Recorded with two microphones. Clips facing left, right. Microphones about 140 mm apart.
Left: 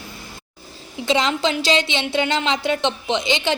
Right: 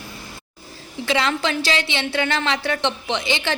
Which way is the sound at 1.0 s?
20° left (ahead or behind).